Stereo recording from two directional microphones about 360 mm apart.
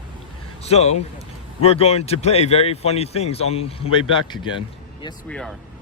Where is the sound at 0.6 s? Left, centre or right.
Centre.